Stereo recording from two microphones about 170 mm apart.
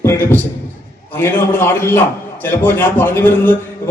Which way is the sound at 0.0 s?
15° left (ahead or behind).